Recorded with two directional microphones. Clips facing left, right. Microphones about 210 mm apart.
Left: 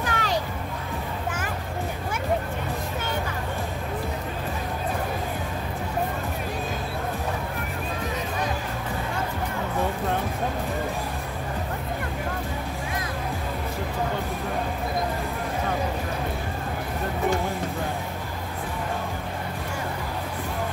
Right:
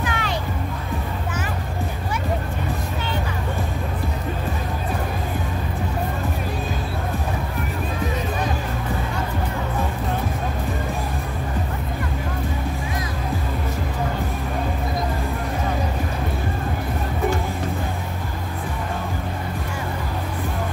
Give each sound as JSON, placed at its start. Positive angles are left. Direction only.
{"t": 0.0, "sound": "music", "side_deg": 40}